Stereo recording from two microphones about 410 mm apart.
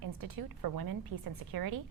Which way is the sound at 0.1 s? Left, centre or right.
Right.